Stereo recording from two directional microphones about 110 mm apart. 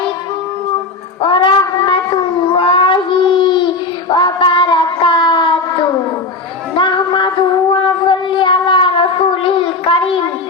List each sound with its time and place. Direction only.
1.2 s child singing: 50° left (ahead or behind)
6.7 s a sound: 45° left (ahead or behind)
7.7 s child singing: 45° left (ahead or behind)